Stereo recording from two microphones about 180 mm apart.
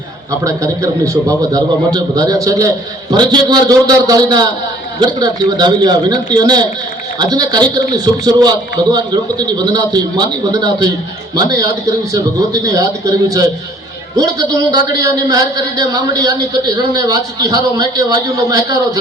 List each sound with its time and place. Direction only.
0.4 s a man's voice: 15° right (ahead or behind)